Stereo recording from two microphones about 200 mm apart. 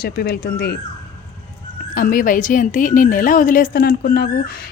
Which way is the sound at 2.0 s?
45° left (ahead or behind).